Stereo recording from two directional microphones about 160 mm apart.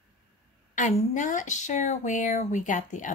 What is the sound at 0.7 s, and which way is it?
Speech, 50° left (ahead or behind).